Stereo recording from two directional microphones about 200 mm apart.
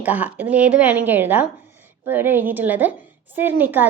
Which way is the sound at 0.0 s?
5° right (ahead or behind).